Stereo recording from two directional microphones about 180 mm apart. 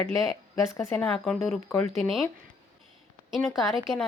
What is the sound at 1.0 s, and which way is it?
Speech, 5° left (ahead or behind).